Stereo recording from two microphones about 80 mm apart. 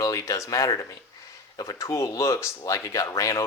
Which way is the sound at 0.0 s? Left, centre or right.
Left.